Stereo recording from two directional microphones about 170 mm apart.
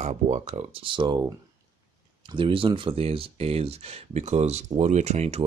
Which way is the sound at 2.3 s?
30° right (ahead or behind).